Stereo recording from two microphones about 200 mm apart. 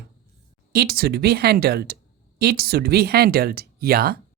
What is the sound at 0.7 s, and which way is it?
Speech, 50° right (ahead or behind).